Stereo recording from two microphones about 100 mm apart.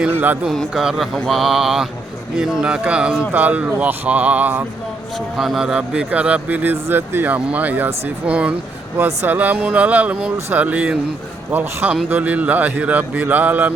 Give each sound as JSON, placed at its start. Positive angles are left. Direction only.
{"t": 0.0, "sound": "speech", "side_deg": -15}
{"t": 0.4, "sound": "mantra", "side_deg": 0}
{"t": 2.3, "sound": "speech", "side_deg": -5}
{"t": 5.4, "sound": "speech", "side_deg": -5}